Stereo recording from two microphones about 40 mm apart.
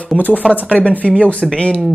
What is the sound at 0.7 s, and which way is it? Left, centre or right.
Speech, left.